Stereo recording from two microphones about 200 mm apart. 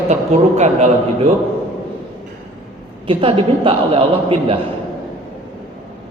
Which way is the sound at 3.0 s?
25° right (ahead or behind).